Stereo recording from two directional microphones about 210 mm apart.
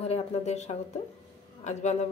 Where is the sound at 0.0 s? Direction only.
30° left (ahead or behind).